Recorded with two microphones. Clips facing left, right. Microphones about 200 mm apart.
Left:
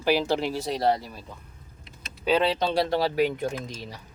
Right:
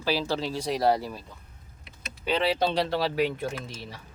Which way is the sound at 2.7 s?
40° left (ahead or behind).